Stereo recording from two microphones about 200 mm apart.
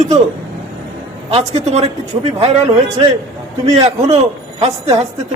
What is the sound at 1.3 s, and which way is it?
A man's voice, 30° right (ahead or behind).